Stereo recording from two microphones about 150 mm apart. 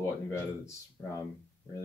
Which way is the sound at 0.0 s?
20° left (ahead or behind).